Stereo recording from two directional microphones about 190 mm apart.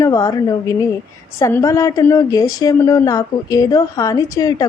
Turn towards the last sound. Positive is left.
turn(degrees=20)  # may be behind; listen again after turning